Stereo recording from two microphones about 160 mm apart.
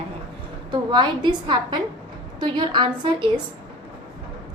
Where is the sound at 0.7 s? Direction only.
30° right (ahead or behind).